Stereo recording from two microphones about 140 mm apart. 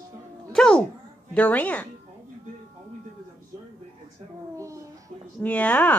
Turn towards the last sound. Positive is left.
turn(degrees=10)  # may be behind; listen again after turning